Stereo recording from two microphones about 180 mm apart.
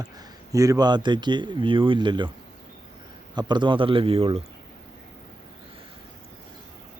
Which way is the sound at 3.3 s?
25° right (ahead or behind).